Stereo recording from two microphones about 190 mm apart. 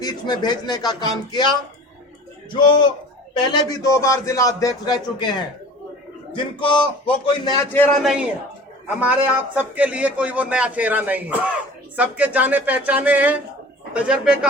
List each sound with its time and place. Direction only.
0.0 s a man's voice: 20° left (ahead or behind)
6.3 s speech: 25° left (ahead or behind)
8.0 s a man's voice: 5° right (ahead or behind)